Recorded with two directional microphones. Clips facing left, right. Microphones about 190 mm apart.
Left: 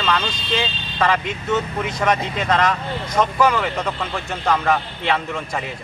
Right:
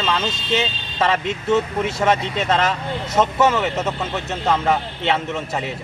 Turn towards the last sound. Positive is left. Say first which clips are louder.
# right 2 dB
turn(degrees=-25)  # may be behind; listen again after turning